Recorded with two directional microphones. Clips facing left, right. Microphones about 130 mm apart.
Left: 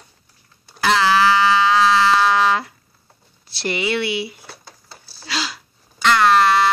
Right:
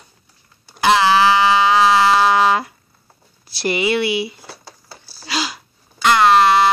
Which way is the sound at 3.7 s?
15° right (ahead or behind).